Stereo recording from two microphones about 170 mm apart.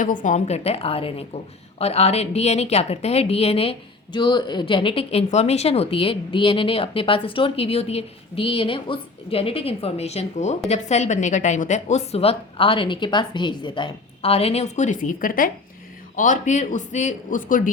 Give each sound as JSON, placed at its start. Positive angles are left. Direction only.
{"t": 0.0, "sound": "a woman's voice", "side_deg": 50}